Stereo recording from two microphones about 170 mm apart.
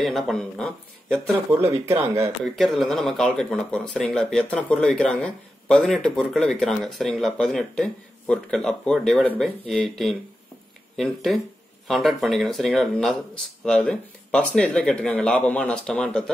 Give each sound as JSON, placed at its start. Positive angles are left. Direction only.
{"t": 0.0, "sound": "speech", "side_deg": 0}
{"t": 1.5, "sound": "speech", "side_deg": -15}
{"t": 2.4, "sound": "speech", "side_deg": 0}